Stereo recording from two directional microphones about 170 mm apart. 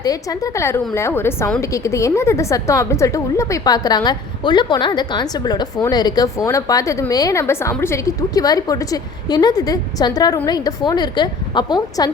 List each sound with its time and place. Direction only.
0.0 s a woman's voice: 20° left (ahead or behind)